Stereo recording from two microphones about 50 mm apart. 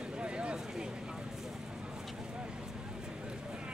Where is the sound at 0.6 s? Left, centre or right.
Centre.